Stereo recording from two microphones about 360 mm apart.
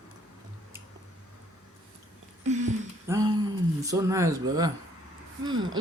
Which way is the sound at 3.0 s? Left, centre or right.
Centre.